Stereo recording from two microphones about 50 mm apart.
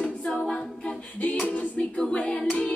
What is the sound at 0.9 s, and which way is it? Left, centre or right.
Singing, left.